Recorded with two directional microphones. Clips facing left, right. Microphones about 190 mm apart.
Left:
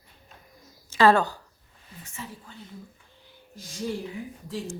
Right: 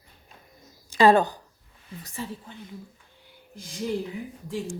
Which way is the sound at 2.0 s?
30° right (ahead or behind).